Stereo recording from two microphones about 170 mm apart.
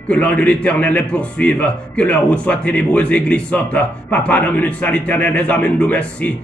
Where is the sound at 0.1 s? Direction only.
5° left (ahead or behind).